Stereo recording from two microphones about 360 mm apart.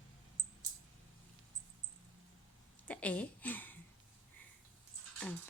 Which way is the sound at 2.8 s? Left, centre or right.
Centre.